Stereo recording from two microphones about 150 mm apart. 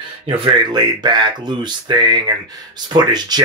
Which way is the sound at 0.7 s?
30° right (ahead or behind).